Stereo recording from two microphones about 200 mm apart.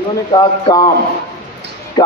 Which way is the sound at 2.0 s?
20° left (ahead or behind).